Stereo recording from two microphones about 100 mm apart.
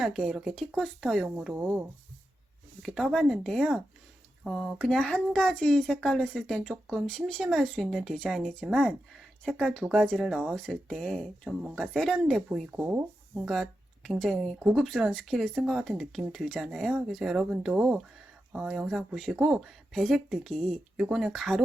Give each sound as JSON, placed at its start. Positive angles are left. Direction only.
{"t": 0.0, "sound": "speech", "side_deg": 0}
{"t": 1.5, "sound": "speech", "side_deg": -10}
{"t": 2.8, "sound": "a woman's voice", "side_deg": 5}
{"t": 12.8, "sound": "speech", "side_deg": -20}
{"t": 13.4, "sound": "speech", "side_deg": 0}